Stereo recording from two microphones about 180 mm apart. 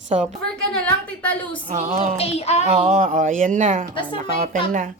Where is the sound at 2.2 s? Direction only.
35° left (ahead or behind).